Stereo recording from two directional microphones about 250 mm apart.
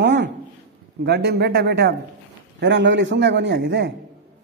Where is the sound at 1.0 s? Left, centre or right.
Right.